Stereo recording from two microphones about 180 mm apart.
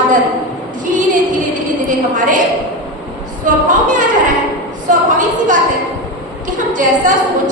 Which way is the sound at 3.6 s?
45° right (ahead or behind).